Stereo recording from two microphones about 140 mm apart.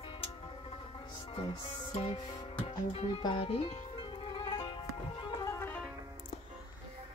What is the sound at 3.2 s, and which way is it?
Speech, 35° left (ahead or behind).